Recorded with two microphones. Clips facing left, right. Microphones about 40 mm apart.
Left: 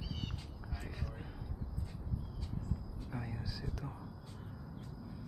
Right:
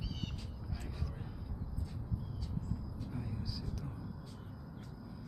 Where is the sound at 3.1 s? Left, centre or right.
Left.